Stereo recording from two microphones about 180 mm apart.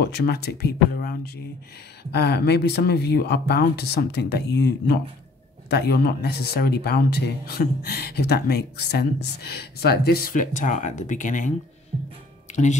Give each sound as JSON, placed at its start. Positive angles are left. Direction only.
{"t": 0.0, "sound": "speech", "side_deg": 65}